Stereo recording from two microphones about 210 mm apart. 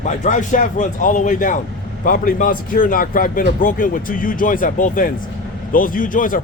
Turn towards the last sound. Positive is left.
turn(degrees=40)  # may be behind; listen again after turning